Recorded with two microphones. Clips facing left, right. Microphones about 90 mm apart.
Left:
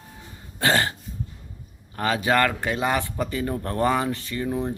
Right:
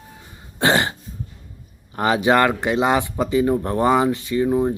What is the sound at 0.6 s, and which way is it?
Throat clearing, 20° right (ahead or behind).